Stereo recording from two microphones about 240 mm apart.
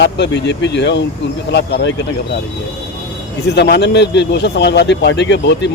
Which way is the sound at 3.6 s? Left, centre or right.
Left.